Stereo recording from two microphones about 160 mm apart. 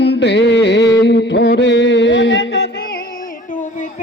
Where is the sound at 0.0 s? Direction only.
90° left.